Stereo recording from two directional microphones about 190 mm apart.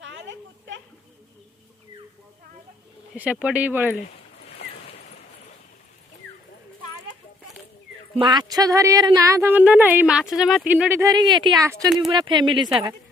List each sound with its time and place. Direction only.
0.0 s a sound: 70° right (ahead or behind)
3.2 s speech: 5° right (ahead or behind)
8.2 s speech: 25° right (ahead or behind)